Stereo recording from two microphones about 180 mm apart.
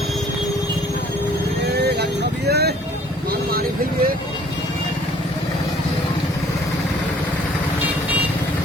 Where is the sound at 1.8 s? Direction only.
65° right (ahead or behind).